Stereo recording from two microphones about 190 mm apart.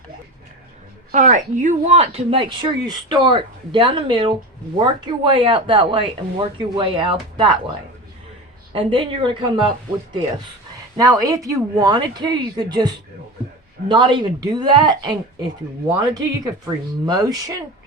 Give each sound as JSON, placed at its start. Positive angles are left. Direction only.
{"t": 1.1, "sound": "speech", "side_deg": -40}
{"t": 8.7, "sound": "speech", "side_deg": -25}